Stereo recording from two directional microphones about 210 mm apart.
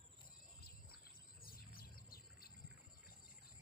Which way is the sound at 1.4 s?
45° left (ahead or behind).